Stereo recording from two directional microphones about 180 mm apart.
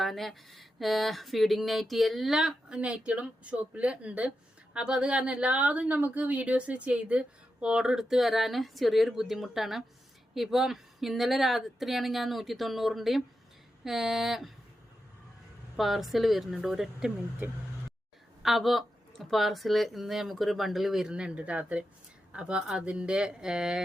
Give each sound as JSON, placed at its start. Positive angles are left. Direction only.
{"t": 0.0, "sound": "a woman's voice", "side_deg": 0}
{"t": 15.7, "sound": "a woman's voice", "side_deg": 0}